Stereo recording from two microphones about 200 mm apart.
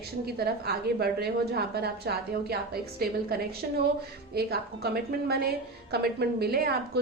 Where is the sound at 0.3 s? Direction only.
55° right (ahead or behind).